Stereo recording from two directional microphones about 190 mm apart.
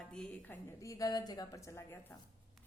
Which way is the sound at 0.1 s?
5° left (ahead or behind).